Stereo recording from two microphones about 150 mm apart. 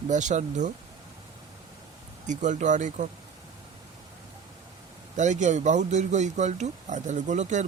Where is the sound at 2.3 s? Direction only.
55° right (ahead or behind).